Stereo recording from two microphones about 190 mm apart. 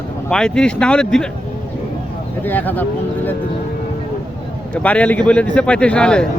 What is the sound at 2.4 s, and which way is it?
Speech, 10° left (ahead or behind).